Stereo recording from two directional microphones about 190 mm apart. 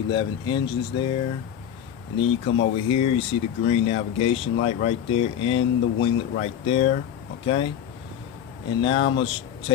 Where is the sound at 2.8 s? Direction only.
30° left (ahead or behind).